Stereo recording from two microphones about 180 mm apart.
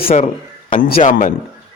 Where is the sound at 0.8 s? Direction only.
55° left (ahead or behind).